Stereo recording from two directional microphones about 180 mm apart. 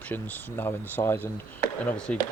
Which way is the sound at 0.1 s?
10° left (ahead or behind).